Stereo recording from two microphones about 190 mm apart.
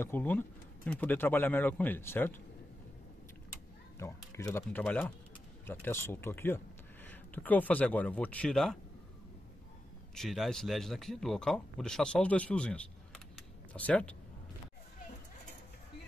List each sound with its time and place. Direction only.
0.0 s speech: 10° left (ahead or behind)
4.0 s speech: 15° left (ahead or behind)
10.1 s speech: centre (ahead or behind)